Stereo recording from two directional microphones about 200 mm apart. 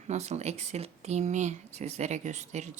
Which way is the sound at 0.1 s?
35° right (ahead or behind).